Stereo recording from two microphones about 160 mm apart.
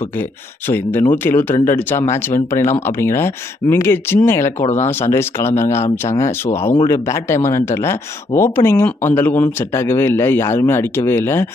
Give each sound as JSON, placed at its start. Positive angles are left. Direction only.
{"t": 0.7, "sound": "speech", "side_deg": 15}
{"t": 4.6, "sound": "speech", "side_deg": 45}
{"t": 4.8, "sound": "speech", "side_deg": 15}